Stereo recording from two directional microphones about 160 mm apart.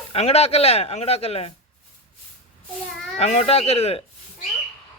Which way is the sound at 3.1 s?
40° left (ahead or behind).